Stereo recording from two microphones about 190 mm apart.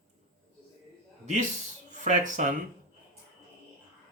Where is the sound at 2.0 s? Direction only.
40° right (ahead or behind).